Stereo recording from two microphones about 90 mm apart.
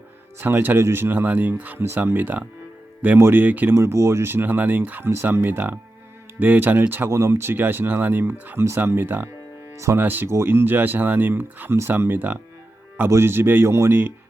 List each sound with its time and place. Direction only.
0.3 s speech: 25° right (ahead or behind)
3.8 s speech: 30° right (ahead or behind)
9.7 s speech: 35° right (ahead or behind)
10.0 s speech: 20° right (ahead or behind)